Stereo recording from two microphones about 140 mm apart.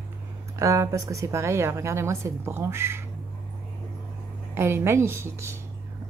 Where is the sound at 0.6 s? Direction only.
20° right (ahead or behind).